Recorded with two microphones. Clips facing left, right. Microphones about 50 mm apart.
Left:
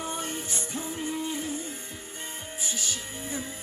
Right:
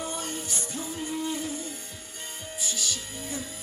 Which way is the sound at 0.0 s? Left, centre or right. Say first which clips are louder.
Even; left.